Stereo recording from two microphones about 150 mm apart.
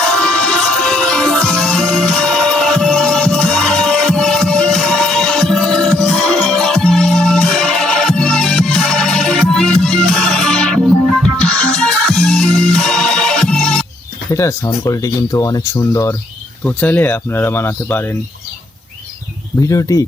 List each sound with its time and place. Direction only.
0.0 s music: 5° left (ahead or behind)
14.3 s speech: 20° left (ahead or behind)
19.6 s speech: 25° left (ahead or behind)